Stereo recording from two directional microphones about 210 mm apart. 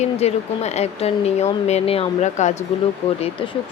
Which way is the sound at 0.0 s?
30° left (ahead or behind).